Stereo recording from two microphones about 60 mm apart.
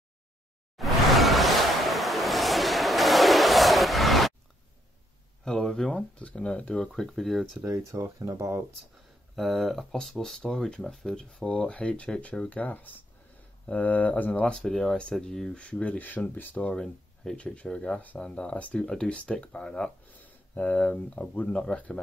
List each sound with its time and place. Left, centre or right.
0.7 s a sound: centre
5.4 s speech: centre
7.0 s speech: centre
7.6 s speech: right
8.3 s speech: right
9.3 s speech: centre; by 14.4 s left
14.4 s speech: centre
16.8 s speech: centre